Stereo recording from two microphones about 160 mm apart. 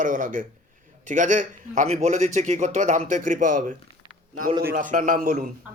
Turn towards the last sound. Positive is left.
turn(degrees=-55)  # may be behind; listen again after turning